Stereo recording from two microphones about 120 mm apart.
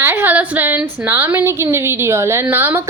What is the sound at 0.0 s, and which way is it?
A woman's voice, 15° right (ahead or behind).